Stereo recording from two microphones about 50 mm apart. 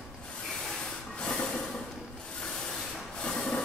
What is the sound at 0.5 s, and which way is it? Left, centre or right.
Train, centre.